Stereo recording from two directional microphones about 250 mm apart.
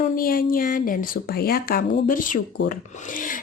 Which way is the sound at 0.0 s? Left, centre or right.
Left.